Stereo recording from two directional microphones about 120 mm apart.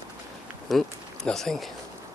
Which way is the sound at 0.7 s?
5° left (ahead or behind).